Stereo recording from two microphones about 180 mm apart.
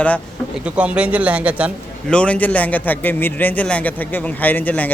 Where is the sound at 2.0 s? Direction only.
5° left (ahead or behind).